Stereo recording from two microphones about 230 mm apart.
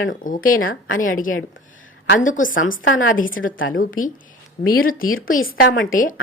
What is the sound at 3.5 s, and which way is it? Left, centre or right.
Speech, left.